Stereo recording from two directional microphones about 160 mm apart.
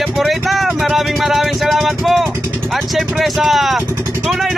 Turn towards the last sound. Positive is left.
turn(degrees=0)  # may be behind; listen again after turning